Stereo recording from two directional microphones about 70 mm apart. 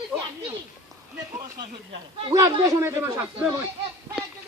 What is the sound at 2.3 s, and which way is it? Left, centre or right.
Speech, right.